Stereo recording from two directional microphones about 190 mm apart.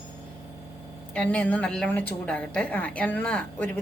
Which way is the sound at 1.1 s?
5° left (ahead or behind).